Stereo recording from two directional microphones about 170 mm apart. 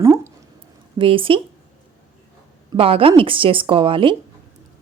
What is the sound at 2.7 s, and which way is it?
A woman's voice, 35° right (ahead or behind).